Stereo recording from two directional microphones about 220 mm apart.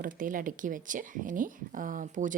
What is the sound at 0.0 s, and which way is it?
Speech, 40° right (ahead or behind).